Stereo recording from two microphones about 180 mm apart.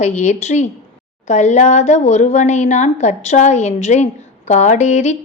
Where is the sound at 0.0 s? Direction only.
40° left (ahead or behind).